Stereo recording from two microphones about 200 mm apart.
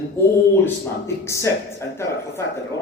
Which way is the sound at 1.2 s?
15° left (ahead or behind).